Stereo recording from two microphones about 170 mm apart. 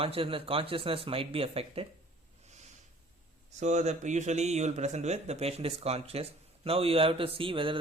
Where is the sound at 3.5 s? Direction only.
45° right (ahead or behind).